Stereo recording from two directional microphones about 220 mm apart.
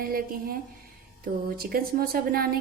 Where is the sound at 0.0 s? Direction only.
40° right (ahead or behind).